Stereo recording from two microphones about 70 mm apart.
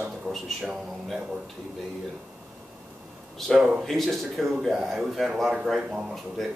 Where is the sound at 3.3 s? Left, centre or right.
Centre.